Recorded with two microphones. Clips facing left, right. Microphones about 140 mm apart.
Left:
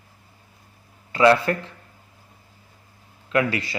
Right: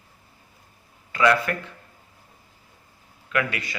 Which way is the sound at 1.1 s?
30° left (ahead or behind).